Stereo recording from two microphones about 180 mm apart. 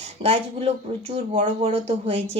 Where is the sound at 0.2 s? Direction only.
35° right (ahead or behind).